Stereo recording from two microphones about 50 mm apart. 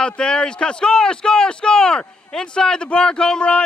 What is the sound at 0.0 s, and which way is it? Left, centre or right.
Speech, centre.